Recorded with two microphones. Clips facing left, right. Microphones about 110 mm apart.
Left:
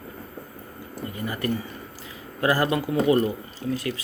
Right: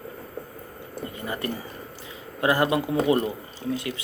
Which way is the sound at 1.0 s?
25° right (ahead or behind).